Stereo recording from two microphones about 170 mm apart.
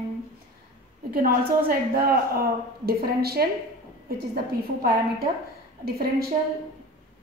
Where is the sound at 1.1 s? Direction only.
60° right (ahead or behind).